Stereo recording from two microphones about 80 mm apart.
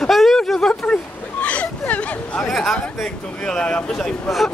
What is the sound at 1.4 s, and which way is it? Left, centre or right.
Hubbub, centre.